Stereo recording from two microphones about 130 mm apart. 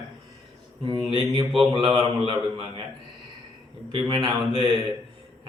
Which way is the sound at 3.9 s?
40° right (ahead or behind).